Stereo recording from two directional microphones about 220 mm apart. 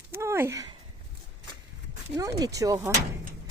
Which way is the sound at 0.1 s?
10° right (ahead or behind).